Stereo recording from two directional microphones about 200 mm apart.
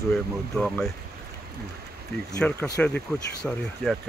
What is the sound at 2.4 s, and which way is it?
Speech, 10° left (ahead or behind).